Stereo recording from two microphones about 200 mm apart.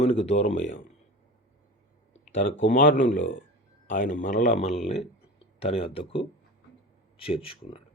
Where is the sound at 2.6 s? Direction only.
40° left (ahead or behind).